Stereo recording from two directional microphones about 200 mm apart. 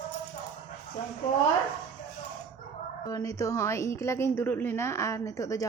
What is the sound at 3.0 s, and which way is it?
A woman's voice, 15° left (ahead or behind).